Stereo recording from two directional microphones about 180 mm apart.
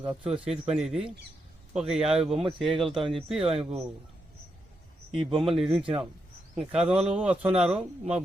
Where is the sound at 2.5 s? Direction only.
30° right (ahead or behind).